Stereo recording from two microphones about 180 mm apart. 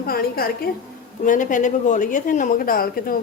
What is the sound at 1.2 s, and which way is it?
Speech, 45° left (ahead or behind).